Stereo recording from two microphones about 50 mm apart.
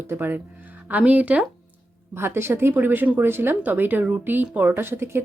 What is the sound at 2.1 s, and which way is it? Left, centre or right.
Speech, right.